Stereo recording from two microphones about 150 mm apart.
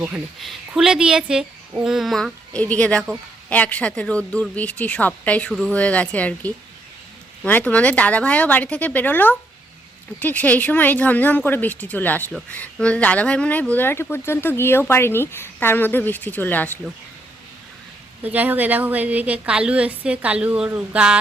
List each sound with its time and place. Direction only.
0.0 s a woman's voice: 5° right (ahead or behind); by 16.6 s 10° left (ahead or behind)
18.2 s a woman's voice: 10° right (ahead or behind)